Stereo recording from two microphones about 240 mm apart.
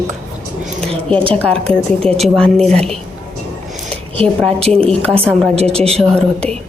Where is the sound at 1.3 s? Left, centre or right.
Centre.